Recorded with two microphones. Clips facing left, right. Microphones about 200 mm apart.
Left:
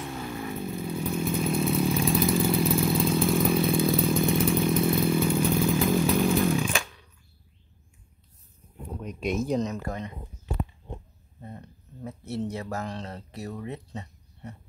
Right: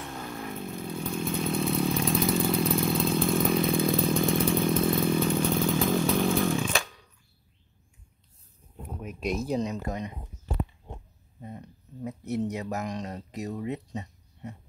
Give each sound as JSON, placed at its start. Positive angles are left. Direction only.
{"t": 0.2, "sound": "vehicle", "side_deg": 5}
{"t": 4.9, "sound": "chainsaw", "side_deg": 15}
{"t": 9.0, "sound": "a sound", "side_deg": 0}
{"t": 9.6, "sound": "speech", "side_deg": -15}
{"t": 11.4, "sound": "speech", "side_deg": -15}